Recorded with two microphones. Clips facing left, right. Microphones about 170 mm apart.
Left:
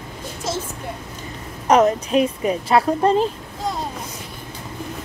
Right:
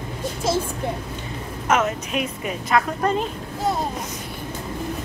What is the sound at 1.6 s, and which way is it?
A woman's voice, 35° left (ahead or behind).